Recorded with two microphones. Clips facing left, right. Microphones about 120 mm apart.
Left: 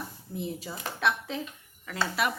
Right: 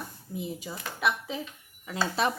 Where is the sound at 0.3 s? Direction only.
Centre (ahead or behind).